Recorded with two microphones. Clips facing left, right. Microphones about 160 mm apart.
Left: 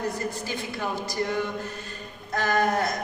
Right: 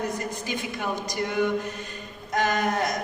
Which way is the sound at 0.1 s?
20° right (ahead or behind).